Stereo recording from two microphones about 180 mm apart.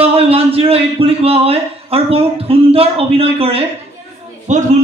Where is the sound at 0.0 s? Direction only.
35° right (ahead or behind).